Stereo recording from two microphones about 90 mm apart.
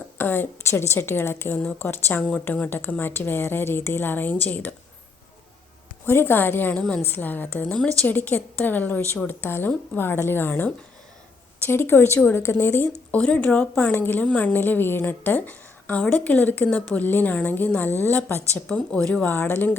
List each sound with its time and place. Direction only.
0.2 s a woman's voice: 25° left (ahead or behind)
6.1 s a woman's voice: 25° left (ahead or behind)
18.7 s speech: 10° left (ahead or behind)